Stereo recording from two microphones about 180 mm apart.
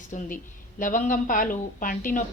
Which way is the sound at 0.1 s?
45° left (ahead or behind).